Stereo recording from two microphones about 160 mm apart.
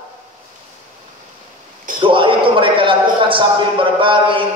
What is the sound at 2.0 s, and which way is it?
A man's voice, 30° right (ahead or behind).